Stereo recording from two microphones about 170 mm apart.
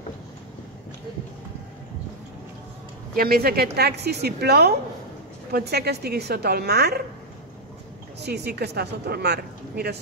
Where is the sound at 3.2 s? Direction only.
60° right (ahead or behind).